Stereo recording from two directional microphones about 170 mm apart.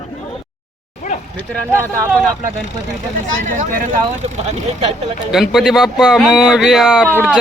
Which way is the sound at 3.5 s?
50° right (ahead or behind).